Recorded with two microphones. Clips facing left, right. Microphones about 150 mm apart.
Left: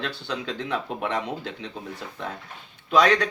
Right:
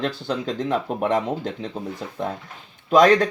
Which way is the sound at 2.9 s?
45° right (ahead or behind).